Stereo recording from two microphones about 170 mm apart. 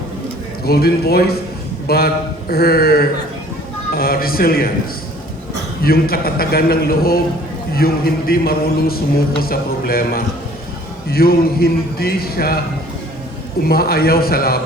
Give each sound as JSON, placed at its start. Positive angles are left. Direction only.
{"t": 0.6, "sound": "a man's voice", "side_deg": 65}
{"t": 5.8, "sound": "a man's voice", "side_deg": 60}
{"t": 13.7, "sound": "a man's voice", "side_deg": 65}